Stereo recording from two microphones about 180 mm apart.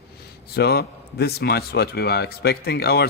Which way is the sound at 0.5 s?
65° left (ahead or behind).